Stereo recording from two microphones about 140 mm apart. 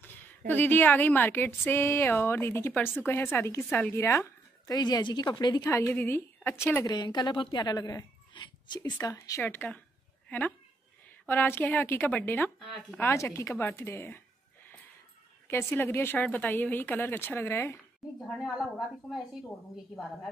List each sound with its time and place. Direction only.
0.5 s speech: 15° left (ahead or behind)
4.6 s a woman's voice: 25° left (ahead or behind)
6.9 s a woman's voice: 30° left (ahead or behind)
9.4 s speech: 15° left (ahead or behind)
11.2 s speech: 15° left (ahead or behind)
12.5 s a woman's voice: centre (ahead or behind)
13.0 s speech: 20° left (ahead or behind)
15.4 s speech: 15° left (ahead or behind)
18.0 s a child's voice: centre (ahead or behind)